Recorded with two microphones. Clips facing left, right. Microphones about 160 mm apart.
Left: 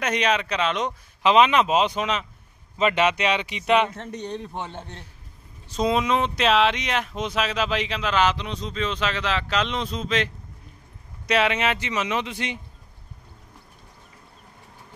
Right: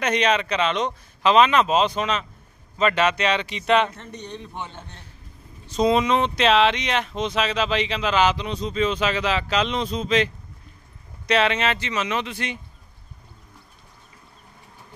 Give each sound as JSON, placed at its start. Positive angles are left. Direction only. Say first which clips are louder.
{"t": 0.0, "sound": "speech", "louder": "right 2 dB", "side_deg": 5}
{"t": 5.7, "sound": "speech", "louder": "right 3 dB", "side_deg": 5}